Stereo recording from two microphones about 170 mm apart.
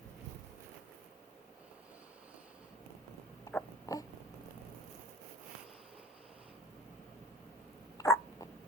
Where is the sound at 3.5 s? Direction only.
20° left (ahead or behind).